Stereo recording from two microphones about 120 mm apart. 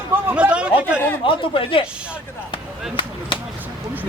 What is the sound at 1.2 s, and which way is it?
Speech, 45° left (ahead or behind).